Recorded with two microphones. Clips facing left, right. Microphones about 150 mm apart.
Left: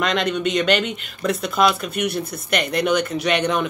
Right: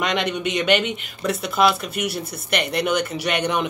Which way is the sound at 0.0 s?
5° right (ahead or behind).